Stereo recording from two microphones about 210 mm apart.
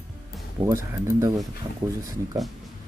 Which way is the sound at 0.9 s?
15° right (ahead or behind).